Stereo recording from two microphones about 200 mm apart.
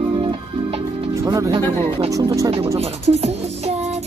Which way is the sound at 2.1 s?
15° right (ahead or behind).